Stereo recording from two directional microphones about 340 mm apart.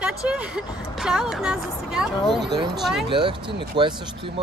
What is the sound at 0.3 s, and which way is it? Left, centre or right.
Speech, centre.